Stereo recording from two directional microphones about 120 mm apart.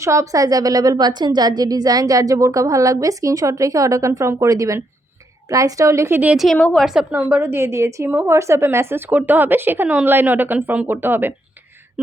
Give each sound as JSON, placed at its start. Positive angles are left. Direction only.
{"t": 0.0, "sound": "a woman's voice", "side_deg": -25}
{"t": 6.3, "sound": "a woman's voice", "side_deg": 0}
{"t": 6.6, "sound": "a woman's voice", "side_deg": 10}
{"t": 6.8, "sound": "a woman's voice", "side_deg": -10}